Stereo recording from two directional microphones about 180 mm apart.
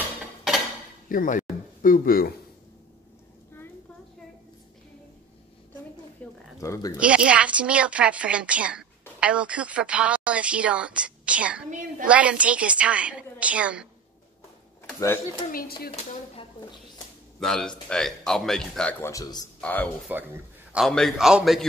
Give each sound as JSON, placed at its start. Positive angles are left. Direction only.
{"t": 1.0, "sound": "speech", "side_deg": 50}
{"t": 6.2, "sound": "a sound", "side_deg": 10}
{"t": 6.6, "sound": "a child's voice", "side_deg": 15}
{"t": 7.0, "sound": "a woman's voice", "side_deg": -5}
{"t": 15.0, "sound": "a child's voice", "side_deg": 15}
{"t": 16.0, "sound": "speech", "side_deg": 35}
{"t": 17.4, "sound": "speech", "side_deg": 5}
{"t": 19.6, "sound": "a child's voice", "side_deg": 10}
{"t": 20.1, "sound": "a woman's voice", "side_deg": -10}
{"t": 20.7, "sound": "speech", "side_deg": 0}